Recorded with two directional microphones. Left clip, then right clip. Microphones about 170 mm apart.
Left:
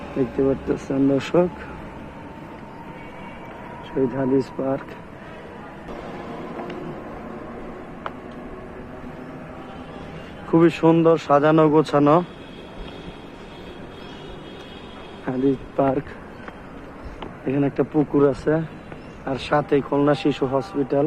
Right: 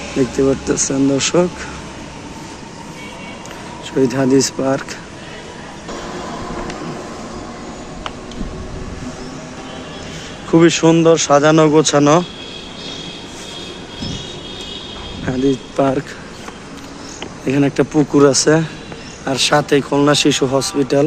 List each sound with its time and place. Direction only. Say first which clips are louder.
0.4 s speech: right 6 dB; 5° left (ahead or behind)
4.1 s speech: right 7 dB; 20° right (ahead or behind)
10.5 s speech: right 5 dB; centre (ahead or behind)
15.3 s cricket: right 5 dB; 5° right (ahead or behind)
15.8 s speech: right 5 dB; centre (ahead or behind)
17.4 s speech: right 7 dB; 10° right (ahead or behind)